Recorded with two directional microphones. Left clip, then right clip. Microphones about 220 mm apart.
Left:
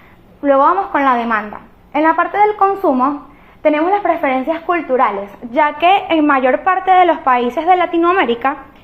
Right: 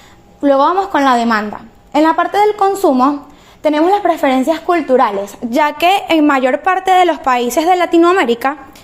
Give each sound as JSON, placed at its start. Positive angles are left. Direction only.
{"t": 0.4, "sound": "a woman's voice", "side_deg": -55}